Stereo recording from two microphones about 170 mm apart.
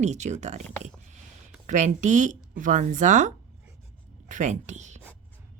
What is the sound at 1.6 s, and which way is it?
A woman's voice, 45° right (ahead or behind).